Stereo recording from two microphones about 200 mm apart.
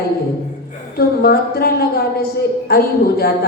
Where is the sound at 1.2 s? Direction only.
50° left (ahead or behind).